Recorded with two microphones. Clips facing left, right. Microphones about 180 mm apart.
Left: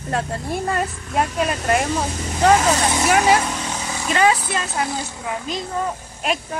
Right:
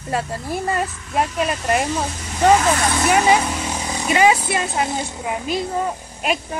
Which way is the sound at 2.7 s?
25° left (ahead or behind).